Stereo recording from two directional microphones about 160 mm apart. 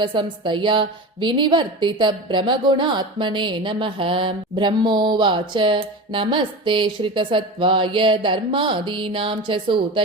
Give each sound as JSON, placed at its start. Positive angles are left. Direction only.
{"t": 0.0, "sound": "a woman's voice", "side_deg": -30}